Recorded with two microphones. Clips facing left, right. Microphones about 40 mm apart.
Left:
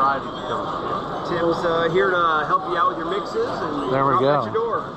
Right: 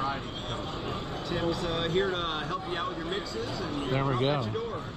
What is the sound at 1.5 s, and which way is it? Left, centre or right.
A man's voice, left.